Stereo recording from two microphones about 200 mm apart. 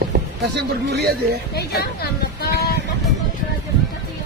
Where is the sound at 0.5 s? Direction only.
55° right (ahead or behind).